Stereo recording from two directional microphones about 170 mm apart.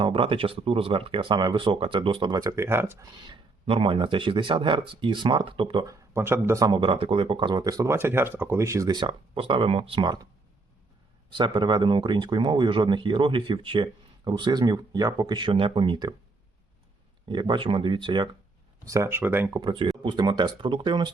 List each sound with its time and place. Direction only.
0.0 s speech: 30° right (ahead or behind); by 3.1 s 15° right (ahead or behind)
3.2 s speech: 30° right (ahead or behind)
5.8 s speech: 15° right (ahead or behind)
11.3 s speech: 25° right (ahead or behind)
17.2 s speech: 25° right (ahead or behind)
18.9 s speech: 15° right (ahead or behind)